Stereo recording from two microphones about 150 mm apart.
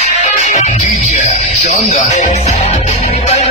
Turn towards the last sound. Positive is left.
turn(degrees=45)  # may be behind; listen again after turning